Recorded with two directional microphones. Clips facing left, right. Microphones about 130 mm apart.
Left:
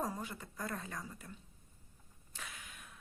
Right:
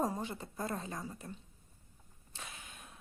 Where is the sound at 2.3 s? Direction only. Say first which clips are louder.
Right 1 dB; 25° right (ahead or behind).